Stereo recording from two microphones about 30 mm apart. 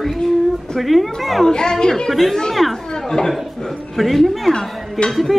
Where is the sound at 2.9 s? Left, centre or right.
Left.